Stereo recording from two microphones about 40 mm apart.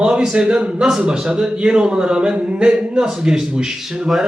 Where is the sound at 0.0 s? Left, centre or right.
Right.